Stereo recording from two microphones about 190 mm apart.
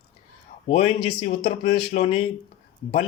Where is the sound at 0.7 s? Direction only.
30° left (ahead or behind).